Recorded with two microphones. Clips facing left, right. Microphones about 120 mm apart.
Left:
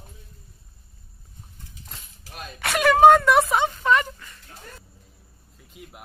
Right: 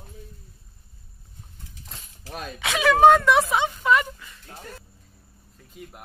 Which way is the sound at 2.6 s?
Centre (ahead or behind).